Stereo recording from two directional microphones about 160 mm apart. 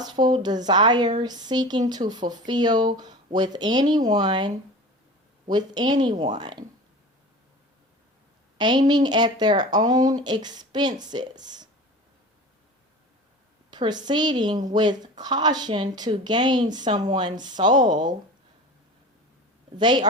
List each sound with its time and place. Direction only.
0.0 s speech: 25° right (ahead or behind)
8.5 s a woman's voice: 30° right (ahead or behind)
13.7 s speech: 25° right (ahead or behind)
17.7 s speech: 50° right (ahead or behind)
19.7 s speech: 30° right (ahead or behind)